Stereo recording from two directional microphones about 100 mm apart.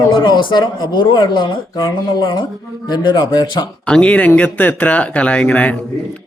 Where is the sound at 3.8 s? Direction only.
10° left (ahead or behind).